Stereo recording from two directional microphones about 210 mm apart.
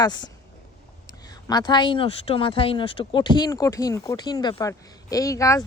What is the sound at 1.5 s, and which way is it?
Speech, 20° left (ahead or behind).